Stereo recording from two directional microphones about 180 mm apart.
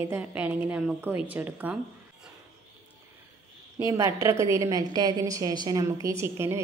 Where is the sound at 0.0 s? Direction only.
10° right (ahead or behind).